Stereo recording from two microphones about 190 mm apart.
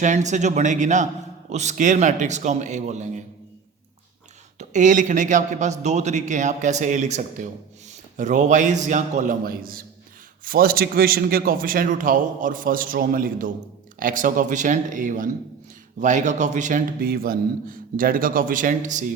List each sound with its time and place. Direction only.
0.0 s a man's voice: 40° right (ahead or behind)
4.5 s a man's voice: 40° right (ahead or behind)